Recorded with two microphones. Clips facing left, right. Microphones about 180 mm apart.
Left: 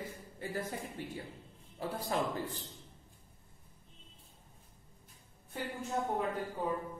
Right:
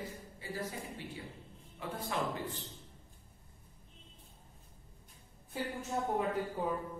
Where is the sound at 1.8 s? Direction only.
35° left (ahead or behind).